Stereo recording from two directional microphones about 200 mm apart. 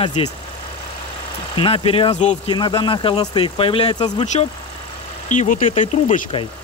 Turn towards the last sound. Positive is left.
turn(degrees=35)  # may be behind; listen again after turning